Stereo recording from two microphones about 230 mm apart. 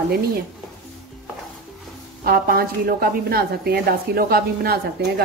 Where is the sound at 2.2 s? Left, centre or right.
Right.